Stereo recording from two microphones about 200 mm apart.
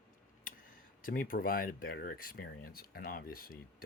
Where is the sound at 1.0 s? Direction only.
45° left (ahead or behind).